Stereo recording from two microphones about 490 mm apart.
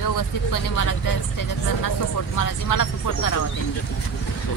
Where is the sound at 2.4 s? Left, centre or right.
Left.